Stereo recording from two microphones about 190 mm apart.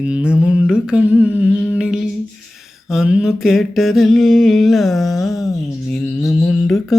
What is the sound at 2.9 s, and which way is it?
Mantra, 5° right (ahead or behind).